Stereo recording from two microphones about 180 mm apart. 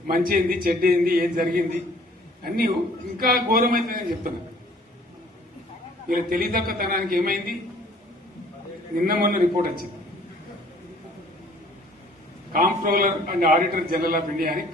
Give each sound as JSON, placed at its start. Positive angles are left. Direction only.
{"t": 0.1, "sound": "a man's voice", "side_deg": -55}
{"t": 3.2, "sound": "a man's voice", "side_deg": -55}
{"t": 6.1, "sound": "a man's voice", "side_deg": -55}
{"t": 9.0, "sound": "a man's voice", "side_deg": -55}
{"t": 12.5, "sound": "a man's voice", "side_deg": -50}